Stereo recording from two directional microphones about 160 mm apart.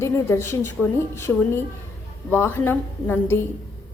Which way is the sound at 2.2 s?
15° left (ahead or behind).